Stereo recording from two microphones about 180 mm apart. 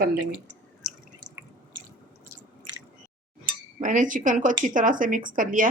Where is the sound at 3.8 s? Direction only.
45° right (ahead or behind).